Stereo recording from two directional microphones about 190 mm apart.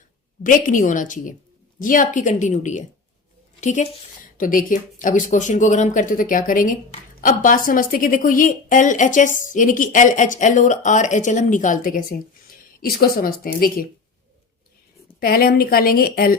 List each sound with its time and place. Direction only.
0.4 s a woman's voice: 40° left (ahead or behind)
15.2 s speech: 50° left (ahead or behind)